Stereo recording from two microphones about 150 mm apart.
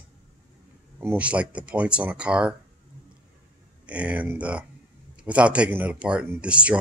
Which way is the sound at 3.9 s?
10° right (ahead or behind).